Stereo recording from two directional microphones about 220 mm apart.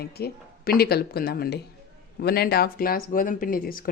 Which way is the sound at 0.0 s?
45° left (ahead or behind).